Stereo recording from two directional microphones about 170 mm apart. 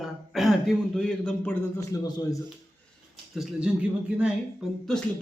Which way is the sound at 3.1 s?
5° right (ahead or behind).